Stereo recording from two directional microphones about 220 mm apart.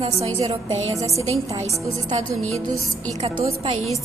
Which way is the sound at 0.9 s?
15° right (ahead or behind).